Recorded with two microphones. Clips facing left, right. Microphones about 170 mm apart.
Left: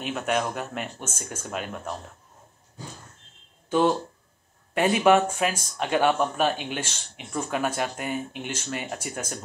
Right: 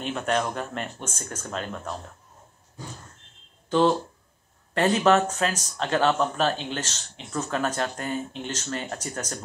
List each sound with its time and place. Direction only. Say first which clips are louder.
0.0 s speech: even; 5° left (ahead or behind)
4.7 s speech: left 1 dB; 10° left (ahead or behind)